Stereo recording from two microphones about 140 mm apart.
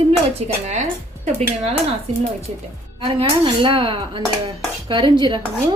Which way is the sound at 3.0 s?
35° right (ahead or behind).